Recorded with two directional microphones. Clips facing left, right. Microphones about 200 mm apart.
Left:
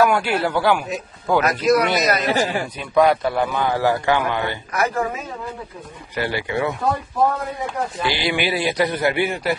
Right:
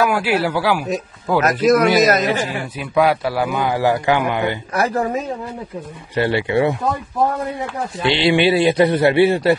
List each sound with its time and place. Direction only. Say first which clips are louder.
0.0 s a man's voice: even; 5° right (ahead or behind)
1.4 s speech: right 5 dB; 45° right (ahead or behind)
2.9 s a man's voice: even; 5° right (ahead or behind)
4.7 s a woman's voice: right 2 dB; 35° right (ahead or behind)
8.0 s speech: right 8 dB; 25° right (ahead or behind)